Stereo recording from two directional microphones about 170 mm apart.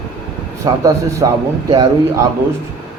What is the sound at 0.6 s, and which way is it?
A man's voice, 20° right (ahead or behind).